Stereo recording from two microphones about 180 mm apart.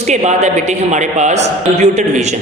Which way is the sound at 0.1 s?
40° right (ahead or behind).